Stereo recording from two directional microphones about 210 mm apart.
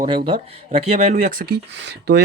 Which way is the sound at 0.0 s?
25° right (ahead or behind).